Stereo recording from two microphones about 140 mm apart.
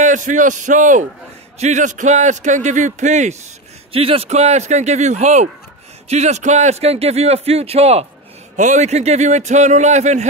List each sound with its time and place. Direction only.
0.0 s a man's voice: 65° right (ahead or behind)
3.9 s a man's voice: 45° right (ahead or behind)
8.5 s a man's voice: 60° right (ahead or behind)